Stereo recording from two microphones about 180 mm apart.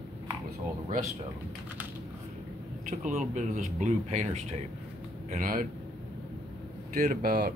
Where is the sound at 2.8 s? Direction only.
45° right (ahead or behind).